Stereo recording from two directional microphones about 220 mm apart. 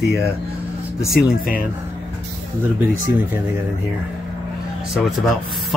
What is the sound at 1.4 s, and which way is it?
Speech, 40° left (ahead or behind).